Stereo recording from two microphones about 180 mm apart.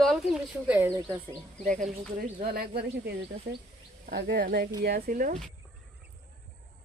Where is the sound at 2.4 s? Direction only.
60° right (ahead or behind).